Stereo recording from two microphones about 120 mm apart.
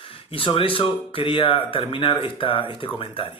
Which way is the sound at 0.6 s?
45° left (ahead or behind).